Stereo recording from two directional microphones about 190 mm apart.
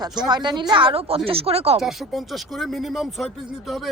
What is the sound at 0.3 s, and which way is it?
A woman's voice, 25° right (ahead or behind).